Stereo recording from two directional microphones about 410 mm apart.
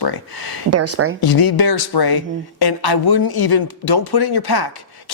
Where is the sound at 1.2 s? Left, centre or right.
Left.